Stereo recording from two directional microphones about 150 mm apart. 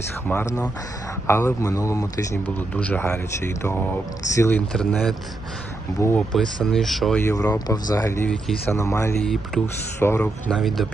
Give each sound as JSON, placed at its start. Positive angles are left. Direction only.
{"t": 0.3, "sound": "speech", "side_deg": 15}
{"t": 4.7, "sound": "speech", "side_deg": 5}
{"t": 6.1, "sound": "speech", "side_deg": 5}
{"t": 7.2, "sound": "speech", "side_deg": 15}
{"t": 8.3, "sound": "speech", "side_deg": 5}
{"t": 8.7, "sound": "speech", "side_deg": 20}
{"t": 9.5, "sound": "speech", "side_deg": 5}
{"t": 10.0, "sound": "speech", "side_deg": 15}
{"t": 10.5, "sound": "speech", "side_deg": 0}